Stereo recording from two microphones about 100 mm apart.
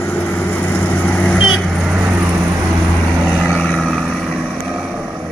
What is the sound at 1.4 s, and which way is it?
Vehicle, 5° right (ahead or behind).